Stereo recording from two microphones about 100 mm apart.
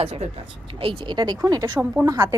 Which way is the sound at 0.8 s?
50° right (ahead or behind).